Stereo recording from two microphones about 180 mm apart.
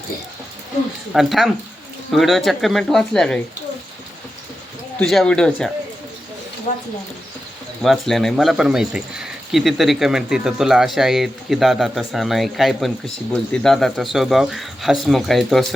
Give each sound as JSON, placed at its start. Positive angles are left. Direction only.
{"t": 1.1, "sound": "speech", "side_deg": 0}
{"t": 4.9, "sound": "speech", "side_deg": 5}
{"t": 7.8, "sound": "speech", "side_deg": 0}